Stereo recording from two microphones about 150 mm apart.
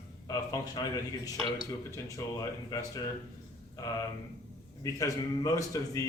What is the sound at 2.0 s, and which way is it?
Speech, 20° left (ahead or behind).